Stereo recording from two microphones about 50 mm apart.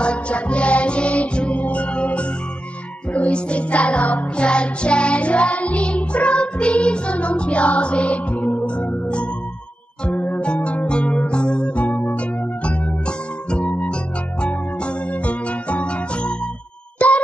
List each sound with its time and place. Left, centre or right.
0.0 s music: left